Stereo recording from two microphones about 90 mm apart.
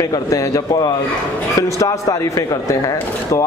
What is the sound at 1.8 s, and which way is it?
A man's voice, 35° left (ahead or behind).